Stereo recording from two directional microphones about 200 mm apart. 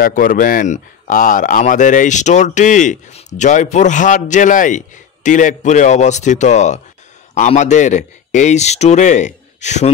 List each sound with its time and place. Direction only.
0.0 s speech: 45° left (ahead or behind)